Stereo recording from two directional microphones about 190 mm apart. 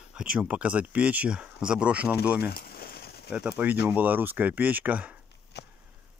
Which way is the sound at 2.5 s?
55° left (ahead or behind).